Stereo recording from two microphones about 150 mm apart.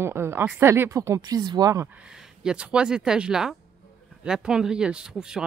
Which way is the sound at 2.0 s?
5° right (ahead or behind).